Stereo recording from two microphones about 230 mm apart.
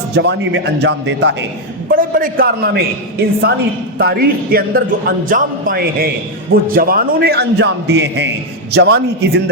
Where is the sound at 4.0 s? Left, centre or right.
Right.